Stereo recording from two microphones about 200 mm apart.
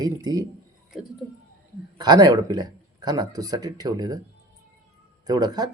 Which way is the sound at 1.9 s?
20° right (ahead or behind).